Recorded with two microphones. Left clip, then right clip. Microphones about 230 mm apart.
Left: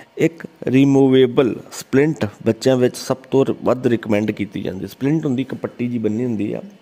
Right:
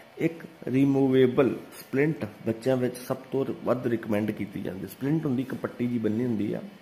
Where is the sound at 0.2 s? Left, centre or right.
Left.